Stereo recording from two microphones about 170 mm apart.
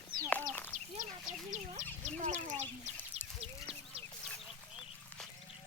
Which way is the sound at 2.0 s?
45° right (ahead or behind).